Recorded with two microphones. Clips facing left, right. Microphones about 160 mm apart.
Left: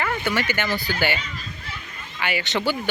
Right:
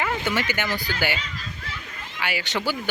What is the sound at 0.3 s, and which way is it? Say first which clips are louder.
Speech: left 1 dB; 15° right (ahead or behind).